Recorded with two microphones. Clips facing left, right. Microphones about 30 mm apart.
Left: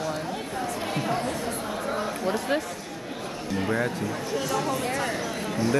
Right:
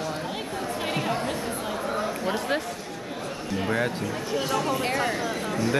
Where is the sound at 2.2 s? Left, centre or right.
Centre.